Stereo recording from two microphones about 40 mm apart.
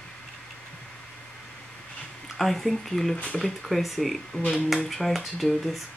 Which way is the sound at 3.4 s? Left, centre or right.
Centre.